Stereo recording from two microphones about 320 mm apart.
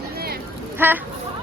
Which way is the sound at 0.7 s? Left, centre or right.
Centre.